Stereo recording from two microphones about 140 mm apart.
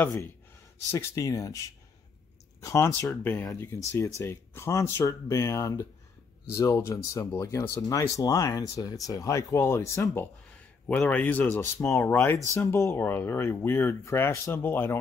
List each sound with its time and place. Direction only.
0.9 s speech: 20° left (ahead or behind)
10.5 s speech: 10° left (ahead or behind)